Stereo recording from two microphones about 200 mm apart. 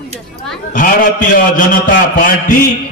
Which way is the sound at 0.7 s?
40° left (ahead or behind).